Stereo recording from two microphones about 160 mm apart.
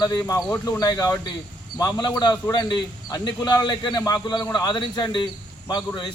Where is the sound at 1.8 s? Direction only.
25° left (ahead or behind).